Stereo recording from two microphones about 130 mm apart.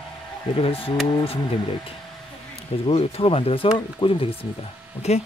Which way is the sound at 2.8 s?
45° left (ahead or behind).